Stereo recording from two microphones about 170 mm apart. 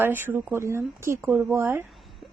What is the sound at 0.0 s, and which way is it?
A woman's voice, 10° right (ahead or behind).